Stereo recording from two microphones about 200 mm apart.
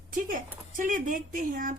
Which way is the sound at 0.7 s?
40° right (ahead or behind).